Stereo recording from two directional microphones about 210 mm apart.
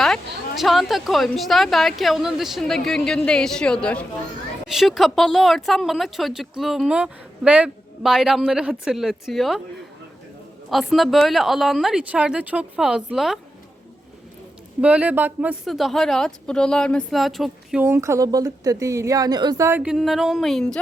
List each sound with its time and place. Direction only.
0.5 s a woman's voice: centre (ahead or behind)
10.7 s a woman's voice: centre (ahead or behind)
14.8 s a woman's voice: 5° right (ahead or behind)